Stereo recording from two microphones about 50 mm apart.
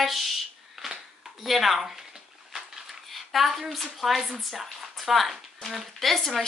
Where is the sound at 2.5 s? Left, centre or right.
Centre.